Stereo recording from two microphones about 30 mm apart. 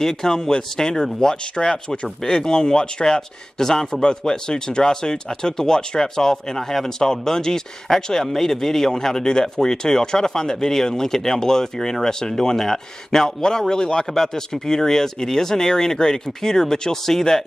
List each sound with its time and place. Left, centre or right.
0.0 s speech: centre